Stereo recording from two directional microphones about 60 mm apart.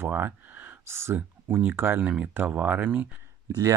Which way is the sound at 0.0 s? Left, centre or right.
Right.